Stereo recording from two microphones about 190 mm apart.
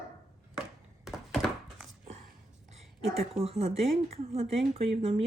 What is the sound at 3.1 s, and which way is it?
Speech, 30° right (ahead or behind).